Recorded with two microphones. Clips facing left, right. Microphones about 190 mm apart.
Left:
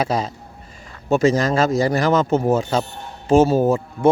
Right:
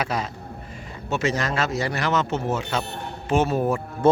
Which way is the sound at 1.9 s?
40° left (ahead or behind).